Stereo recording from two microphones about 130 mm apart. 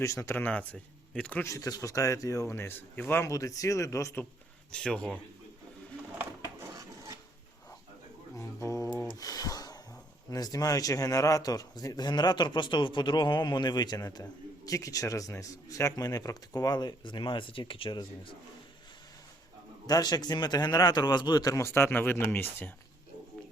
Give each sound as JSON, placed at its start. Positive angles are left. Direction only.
{"t": 0.0, "sound": "speech", "side_deg": 25}
{"t": 1.5, "sound": "speech", "side_deg": 25}
{"t": 4.7, "sound": "speech", "side_deg": 5}
{"t": 6.7, "sound": "filing", "side_deg": -25}
{"t": 8.4, "sound": "a sound", "side_deg": 25}
{"t": 10.2, "sound": "speech", "side_deg": 30}
{"t": 19.9, "sound": "speech", "side_deg": 30}